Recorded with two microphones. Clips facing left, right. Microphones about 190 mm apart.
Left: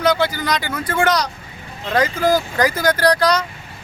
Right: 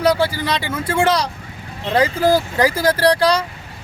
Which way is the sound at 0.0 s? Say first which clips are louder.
Right 1 dB; 30° right (ahead or behind).